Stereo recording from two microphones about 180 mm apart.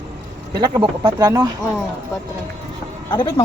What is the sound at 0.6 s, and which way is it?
Speech, 20° right (ahead or behind).